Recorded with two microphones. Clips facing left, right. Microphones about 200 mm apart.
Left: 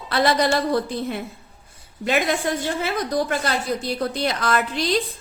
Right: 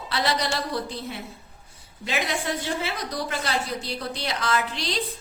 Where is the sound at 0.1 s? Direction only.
55° left (ahead or behind).